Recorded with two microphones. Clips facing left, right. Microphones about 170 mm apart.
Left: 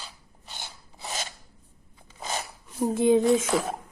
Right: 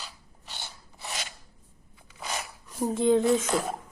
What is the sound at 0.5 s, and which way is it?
Filing, 15° left (ahead or behind).